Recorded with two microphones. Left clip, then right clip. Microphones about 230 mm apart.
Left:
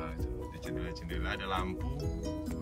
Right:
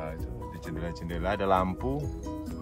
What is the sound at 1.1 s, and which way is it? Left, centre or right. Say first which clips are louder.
Speech: right 10 dB; centre.